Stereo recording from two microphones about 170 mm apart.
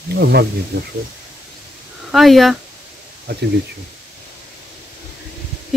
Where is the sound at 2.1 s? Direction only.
Centre (ahead or behind).